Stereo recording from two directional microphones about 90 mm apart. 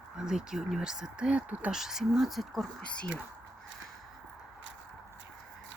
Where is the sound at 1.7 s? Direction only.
5° right (ahead or behind).